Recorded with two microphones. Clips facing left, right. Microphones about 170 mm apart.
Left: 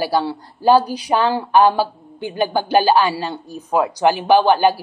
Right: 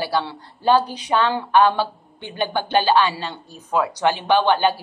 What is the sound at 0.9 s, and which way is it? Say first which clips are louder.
Speech: left 3 dB; 35° left (ahead or behind).